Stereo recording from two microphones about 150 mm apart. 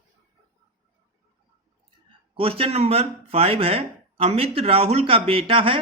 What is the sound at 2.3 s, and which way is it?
Speech, 40° right (ahead or behind).